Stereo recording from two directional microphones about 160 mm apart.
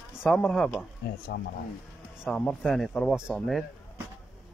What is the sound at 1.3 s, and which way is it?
Speech, 90° left.